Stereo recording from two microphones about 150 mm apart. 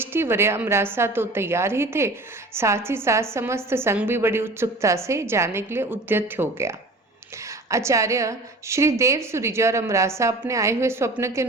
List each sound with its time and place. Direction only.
0.0 s a woman's voice: 15° right (ahead or behind)